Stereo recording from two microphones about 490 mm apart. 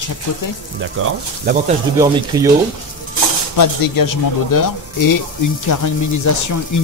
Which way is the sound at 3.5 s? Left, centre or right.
Left.